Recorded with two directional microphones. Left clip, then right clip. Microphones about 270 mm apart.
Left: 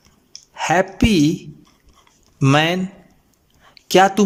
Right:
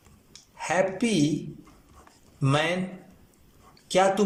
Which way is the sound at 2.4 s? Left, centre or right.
Left.